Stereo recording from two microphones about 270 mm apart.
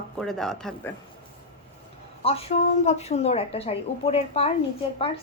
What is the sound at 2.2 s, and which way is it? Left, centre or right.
Speech, left.